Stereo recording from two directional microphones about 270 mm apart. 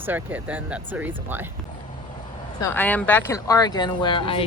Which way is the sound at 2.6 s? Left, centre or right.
Centre.